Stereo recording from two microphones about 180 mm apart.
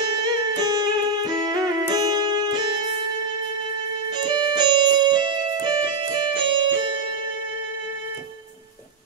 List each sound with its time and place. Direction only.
0.0 s music: 20° right (ahead or behind)
4.2 s music: 25° right (ahead or behind)